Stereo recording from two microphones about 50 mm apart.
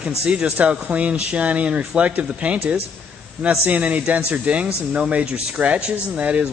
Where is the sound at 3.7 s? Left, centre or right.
Right.